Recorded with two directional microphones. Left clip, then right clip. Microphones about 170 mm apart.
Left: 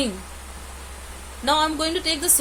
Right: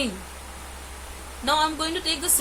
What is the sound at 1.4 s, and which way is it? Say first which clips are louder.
Speech: left 2 dB; 30° left (ahead or behind).